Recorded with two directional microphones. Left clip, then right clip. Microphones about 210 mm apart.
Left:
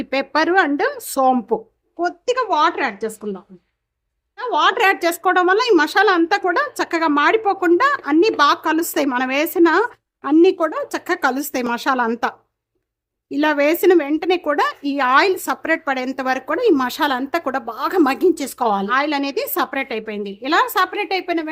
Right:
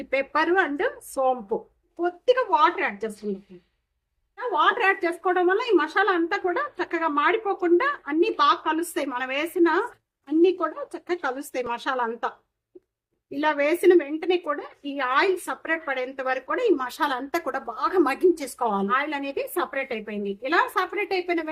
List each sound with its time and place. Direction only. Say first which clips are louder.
0.1 s speech: left 5 dB; 45° left (ahead or behind)
4.4 s speech: left 5 dB; 50° left (ahead or behind)
13.3 s speech: left 6 dB; 50° left (ahead or behind)